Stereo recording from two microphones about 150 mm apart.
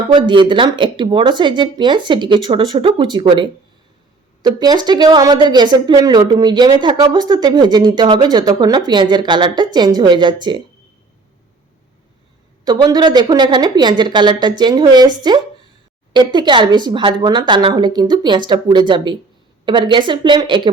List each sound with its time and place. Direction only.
0.1 s a woman's voice: 30° right (ahead or behind)
12.6 s a woman's voice: 25° right (ahead or behind)